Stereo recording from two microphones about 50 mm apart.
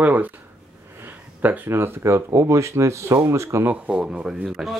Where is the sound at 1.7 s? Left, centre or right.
Right.